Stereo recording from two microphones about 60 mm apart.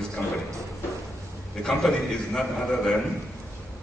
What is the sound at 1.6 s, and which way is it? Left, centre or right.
A man's voice, centre.